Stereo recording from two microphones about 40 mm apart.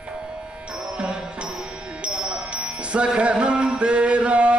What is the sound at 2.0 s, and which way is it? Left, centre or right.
Music, right.